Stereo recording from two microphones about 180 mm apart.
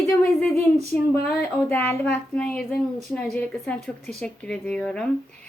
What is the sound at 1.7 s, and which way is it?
A woman's voice, 10° left (ahead or behind).